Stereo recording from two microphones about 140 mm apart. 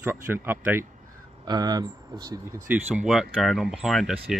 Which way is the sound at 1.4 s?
30° right (ahead or behind).